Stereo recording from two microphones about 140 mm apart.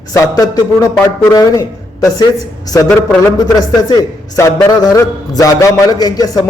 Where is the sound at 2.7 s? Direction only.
20° left (ahead or behind).